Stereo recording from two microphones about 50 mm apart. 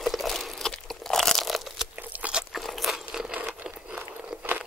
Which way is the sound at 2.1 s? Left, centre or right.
Right.